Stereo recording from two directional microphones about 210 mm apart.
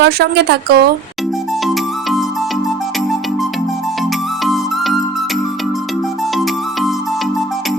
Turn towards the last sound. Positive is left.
turn(degrees=0)  # may be behind; listen again after turning